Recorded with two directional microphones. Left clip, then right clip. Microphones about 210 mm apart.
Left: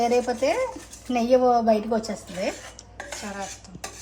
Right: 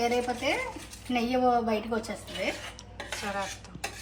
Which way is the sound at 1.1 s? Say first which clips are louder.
Left 6 dB; 40° left (ahead or behind).